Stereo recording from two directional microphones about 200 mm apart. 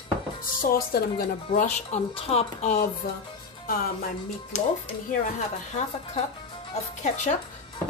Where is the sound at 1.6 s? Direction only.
30° left (ahead or behind).